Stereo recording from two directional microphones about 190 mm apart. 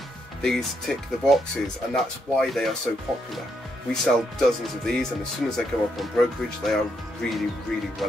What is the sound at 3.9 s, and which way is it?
Speech, centre (ahead or behind).